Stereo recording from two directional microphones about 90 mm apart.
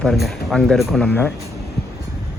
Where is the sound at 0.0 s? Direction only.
Centre (ahead or behind).